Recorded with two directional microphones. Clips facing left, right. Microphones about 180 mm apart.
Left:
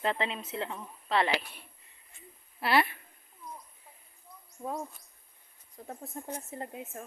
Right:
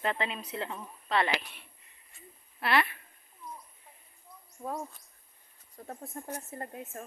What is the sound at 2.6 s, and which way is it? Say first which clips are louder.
Speech: left 1 dB; 30° left (ahead or behind).